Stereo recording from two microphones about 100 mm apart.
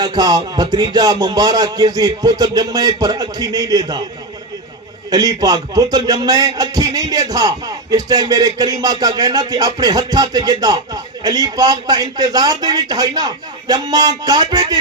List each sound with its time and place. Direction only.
0.0 s a man's voice: 45° right (ahead or behind)
5.1 s a man's voice: 40° right (ahead or behind)